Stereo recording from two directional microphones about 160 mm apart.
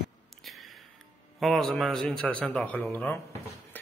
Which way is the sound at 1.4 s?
Centre (ahead or behind).